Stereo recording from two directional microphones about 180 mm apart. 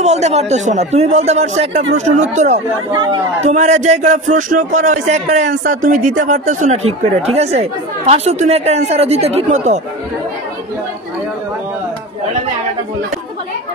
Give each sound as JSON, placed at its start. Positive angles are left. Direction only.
{"t": 0.0, "sound": "speech", "side_deg": -40}
{"t": 2.9, "sound": "speech", "side_deg": -20}
{"t": 3.4, "sound": "speech", "side_deg": -40}
{"t": 8.1, "sound": "speech", "side_deg": -35}